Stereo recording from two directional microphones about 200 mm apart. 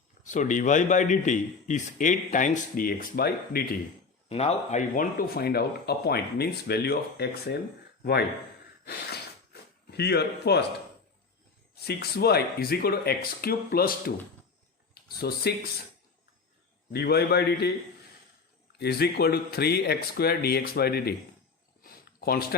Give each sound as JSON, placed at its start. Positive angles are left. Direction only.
{"t": 0.3, "sound": "a man's voice", "side_deg": 40}
{"t": 4.3, "sound": "speech", "side_deg": 30}
{"t": 10.0, "sound": "a man's voice", "side_deg": 55}
{"t": 11.7, "sound": "speech", "side_deg": 55}
{"t": 15.2, "sound": "speech", "side_deg": 55}
{"t": 16.9, "sound": "a man's voice", "side_deg": 55}
{"t": 18.7, "sound": "speech", "side_deg": 55}
{"t": 21.8, "sound": "a sound", "side_deg": 50}